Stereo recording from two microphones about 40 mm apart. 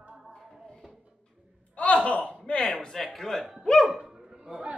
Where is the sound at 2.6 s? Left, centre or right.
Centre.